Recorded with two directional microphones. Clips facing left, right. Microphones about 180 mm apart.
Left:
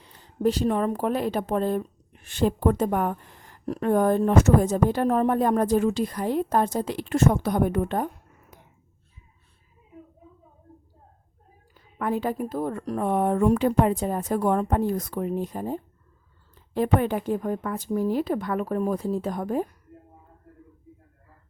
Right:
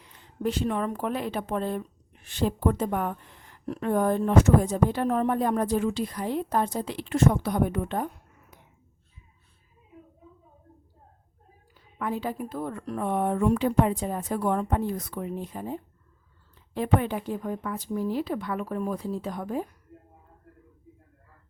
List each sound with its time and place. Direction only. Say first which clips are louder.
0.0 s a woman's voice: left 6 dB; 35° left (ahead or behind)
11.7 s a woman's voice: left 4 dB; 50° left (ahead or behind)